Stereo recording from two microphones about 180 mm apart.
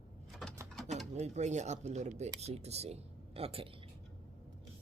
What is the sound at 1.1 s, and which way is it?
Speech, 40° right (ahead or behind).